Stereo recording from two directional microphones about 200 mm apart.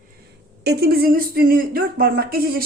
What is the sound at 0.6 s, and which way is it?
Speech, 55° right (ahead or behind).